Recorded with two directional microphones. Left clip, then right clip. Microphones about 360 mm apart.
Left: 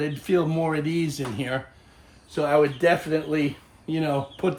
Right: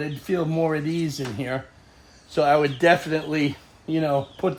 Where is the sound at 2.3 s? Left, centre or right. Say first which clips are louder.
Right 2 dB; right.